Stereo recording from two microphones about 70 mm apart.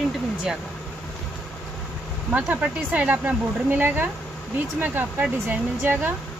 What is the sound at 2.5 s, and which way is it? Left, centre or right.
Speech, right.